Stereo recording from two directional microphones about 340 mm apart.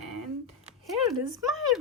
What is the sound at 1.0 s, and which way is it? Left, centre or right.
Speech, centre.